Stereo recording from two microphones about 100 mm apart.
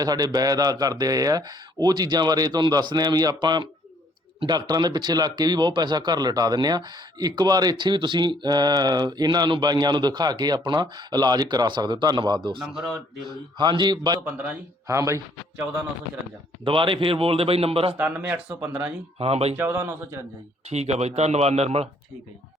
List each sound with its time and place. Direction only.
0.0 s speech: 40° right (ahead or behind)
12.5 s a man's voice: 5° right (ahead or behind)
13.2 s speech: 50° right (ahead or behind)
14.8 s a man's voice: 30° right (ahead or behind)
16.6 s a man's voice: 60° right (ahead or behind)
17.9 s speech: 15° right (ahead or behind)
19.2 s speech: 90° right
19.5 s a man's voice: 20° right (ahead or behind)
20.7 s speech: 90° right